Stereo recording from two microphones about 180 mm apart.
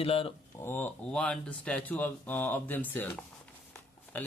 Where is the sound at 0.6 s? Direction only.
10° left (ahead or behind).